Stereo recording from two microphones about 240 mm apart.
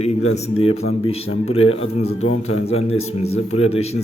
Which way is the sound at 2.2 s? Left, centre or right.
Left.